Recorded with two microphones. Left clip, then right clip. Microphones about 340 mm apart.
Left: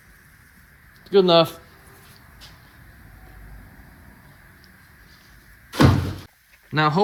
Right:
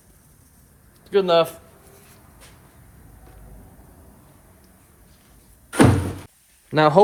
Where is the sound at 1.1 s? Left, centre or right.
Left.